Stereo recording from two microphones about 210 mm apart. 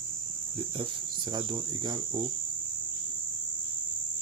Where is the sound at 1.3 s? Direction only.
20° right (ahead or behind).